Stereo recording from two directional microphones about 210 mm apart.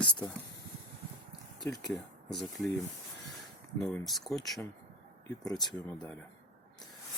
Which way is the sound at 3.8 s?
Centre (ahead or behind).